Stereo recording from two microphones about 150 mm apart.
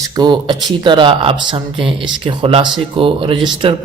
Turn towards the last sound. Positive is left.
turn(degrees=-35)  # may be behind; listen again after turning